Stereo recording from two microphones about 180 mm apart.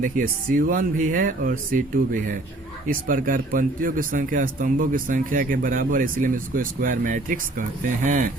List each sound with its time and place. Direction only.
0.0 s speech: 50° right (ahead or behind)